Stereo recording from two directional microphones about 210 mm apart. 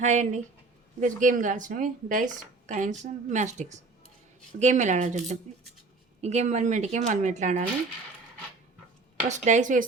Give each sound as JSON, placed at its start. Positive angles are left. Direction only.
{"t": 0.0, "sound": "speech", "side_deg": -35}
{"t": 9.3, "sound": "speech", "side_deg": -35}